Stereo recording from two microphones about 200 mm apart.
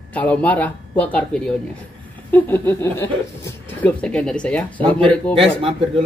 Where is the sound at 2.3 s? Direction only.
10° left (ahead or behind).